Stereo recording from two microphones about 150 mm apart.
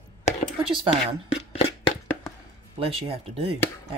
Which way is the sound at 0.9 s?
40° left (ahead or behind).